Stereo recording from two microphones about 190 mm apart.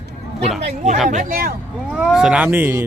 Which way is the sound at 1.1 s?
45° right (ahead or behind).